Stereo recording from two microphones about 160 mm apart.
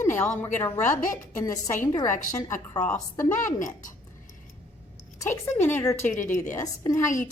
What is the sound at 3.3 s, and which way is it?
Speech, 50° left (ahead or behind).